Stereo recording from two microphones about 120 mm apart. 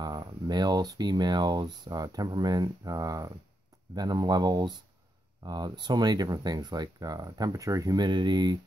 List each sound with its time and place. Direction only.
0.0 s speech: 35° right (ahead or behind)